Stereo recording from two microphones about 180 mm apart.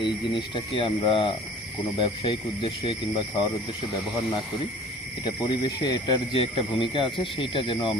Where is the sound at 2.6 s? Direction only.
30° left (ahead or behind).